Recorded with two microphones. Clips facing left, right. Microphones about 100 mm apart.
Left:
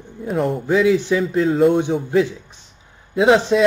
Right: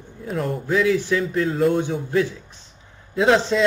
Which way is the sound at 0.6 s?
20° left (ahead or behind).